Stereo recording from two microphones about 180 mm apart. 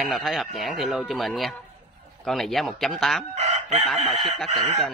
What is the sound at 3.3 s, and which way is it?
Chicken, 40° right (ahead or behind).